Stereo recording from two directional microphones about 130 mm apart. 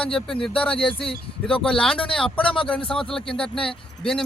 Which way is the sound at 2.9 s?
5° left (ahead or behind).